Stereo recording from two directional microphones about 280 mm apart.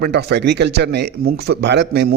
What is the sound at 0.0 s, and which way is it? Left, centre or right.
Speech, right.